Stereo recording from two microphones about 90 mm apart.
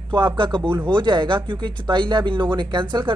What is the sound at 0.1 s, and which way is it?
Speech, 70° right (ahead or behind).